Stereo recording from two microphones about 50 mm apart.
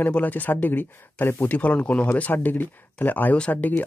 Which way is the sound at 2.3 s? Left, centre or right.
Left.